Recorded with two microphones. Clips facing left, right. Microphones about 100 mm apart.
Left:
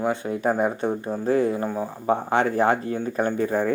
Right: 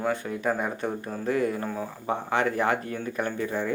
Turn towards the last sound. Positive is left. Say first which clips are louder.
# left 6 dB
turn(degrees=45)  # may be behind; listen again after turning